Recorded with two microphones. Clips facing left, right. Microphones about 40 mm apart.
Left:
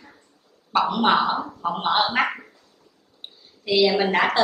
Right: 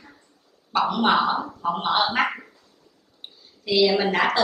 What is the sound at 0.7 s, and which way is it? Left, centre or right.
Speech, centre.